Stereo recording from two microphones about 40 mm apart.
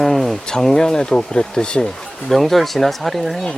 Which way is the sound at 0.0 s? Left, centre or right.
Centre.